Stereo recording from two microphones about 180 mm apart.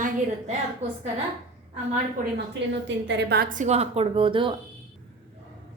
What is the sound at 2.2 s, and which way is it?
Speech, 45° right (ahead or behind).